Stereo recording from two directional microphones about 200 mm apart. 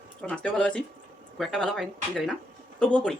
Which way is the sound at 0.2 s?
5° left (ahead or behind).